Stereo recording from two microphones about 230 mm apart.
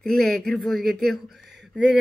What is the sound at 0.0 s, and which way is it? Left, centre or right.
Speech, centre.